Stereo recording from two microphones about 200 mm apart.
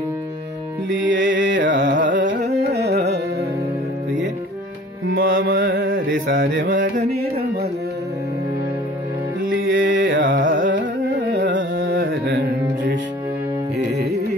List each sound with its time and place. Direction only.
0.9 s carnatic music: 65° right (ahead or behind)
5.3 s music: 50° right (ahead or behind)
5.8 s mantra: 45° right (ahead or behind)
6.0 s mantra: 70° right (ahead or behind)
6.6 s carnatic music: 45° right (ahead or behind)
7.0 s a sound: 50° right (ahead or behind)
9.5 s music: 50° right (ahead or behind)
10.0 s carnatic music: 70° right (ahead or behind)
10.7 s music: 60° right (ahead or behind)